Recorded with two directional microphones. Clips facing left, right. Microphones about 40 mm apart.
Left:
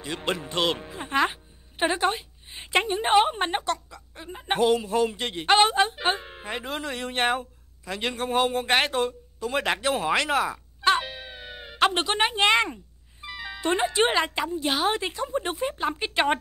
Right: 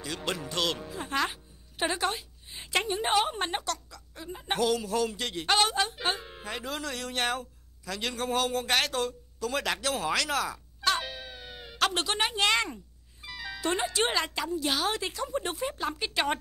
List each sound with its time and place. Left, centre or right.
0.0 s speech: left